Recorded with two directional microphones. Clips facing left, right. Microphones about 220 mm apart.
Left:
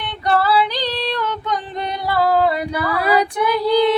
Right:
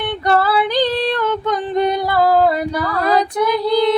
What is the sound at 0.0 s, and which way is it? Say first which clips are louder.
Female singing: right 3 dB; 50° right (ahead or behind).